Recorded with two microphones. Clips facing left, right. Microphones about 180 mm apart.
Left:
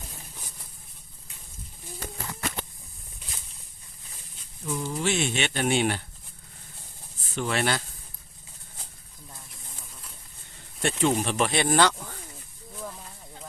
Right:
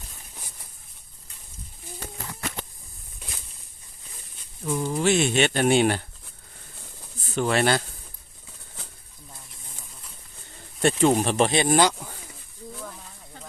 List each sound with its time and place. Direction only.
4.6 s speech: 55° right (ahead or behind)
7.3 s speech: 40° right (ahead or behind)
10.8 s speech: 35° right (ahead or behind)
11.6 s speech: 15° right (ahead or behind)